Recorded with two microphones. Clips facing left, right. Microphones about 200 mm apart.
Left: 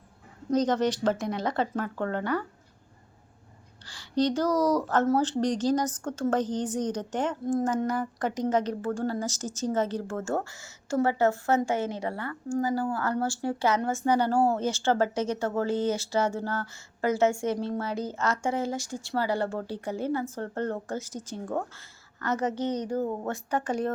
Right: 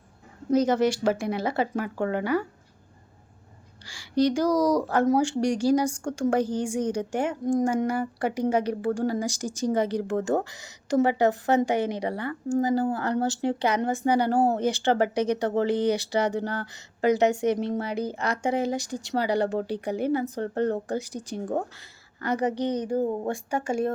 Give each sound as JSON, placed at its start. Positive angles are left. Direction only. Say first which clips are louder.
{"t": 0.5, "sound": "a woman's voice", "louder": "right 3 dB", "side_deg": -10}
{"t": 3.8, "sound": "a woman's voice", "louder": "right 3 dB", "side_deg": -10}